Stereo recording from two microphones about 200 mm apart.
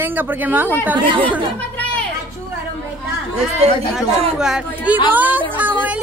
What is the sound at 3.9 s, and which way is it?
A woman's voice, 5° right (ahead or behind).